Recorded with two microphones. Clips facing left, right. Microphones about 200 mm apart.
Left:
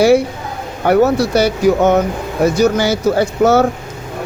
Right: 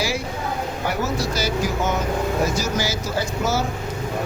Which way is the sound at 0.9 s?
65° left (ahead or behind).